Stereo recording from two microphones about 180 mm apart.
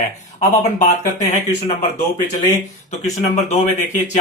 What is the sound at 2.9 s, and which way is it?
Speech, 40° left (ahead or behind).